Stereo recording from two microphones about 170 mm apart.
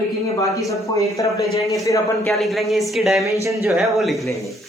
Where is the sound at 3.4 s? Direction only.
15° right (ahead or behind).